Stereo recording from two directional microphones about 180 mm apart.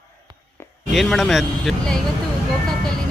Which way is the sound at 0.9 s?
Centre (ahead or behind).